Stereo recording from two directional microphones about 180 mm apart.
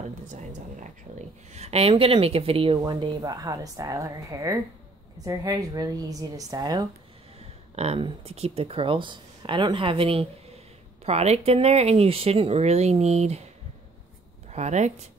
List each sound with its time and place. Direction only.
0.3 s speech: 40° right (ahead or behind); by 6.9 s 20° right (ahead or behind)
7.7 s speech: 35° right (ahead or behind)
14.5 s speech: 40° right (ahead or behind)